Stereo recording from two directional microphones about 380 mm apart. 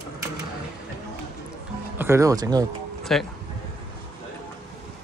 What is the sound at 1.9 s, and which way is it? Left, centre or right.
Speech, centre.